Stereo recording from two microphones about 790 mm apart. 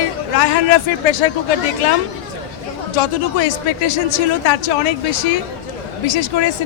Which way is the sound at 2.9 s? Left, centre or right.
Left.